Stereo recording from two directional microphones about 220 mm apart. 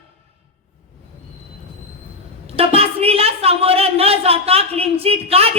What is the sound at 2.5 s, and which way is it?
A woman's voice, 25° right (ahead or behind).